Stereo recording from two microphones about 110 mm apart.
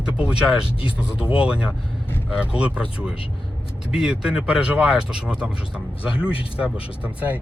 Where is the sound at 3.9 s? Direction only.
5° right (ahead or behind).